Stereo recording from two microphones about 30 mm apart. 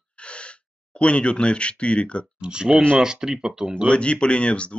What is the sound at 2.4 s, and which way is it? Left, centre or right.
Speech, right.